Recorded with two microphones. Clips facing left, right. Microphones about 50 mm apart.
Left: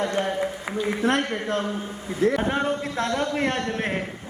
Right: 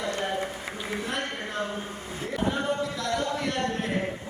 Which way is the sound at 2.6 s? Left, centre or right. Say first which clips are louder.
Left 3 dB; left.